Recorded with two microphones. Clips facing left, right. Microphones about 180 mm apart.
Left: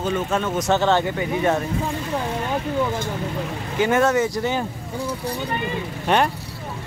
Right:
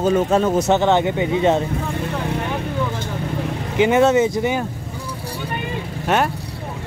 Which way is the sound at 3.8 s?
20° right (ahead or behind).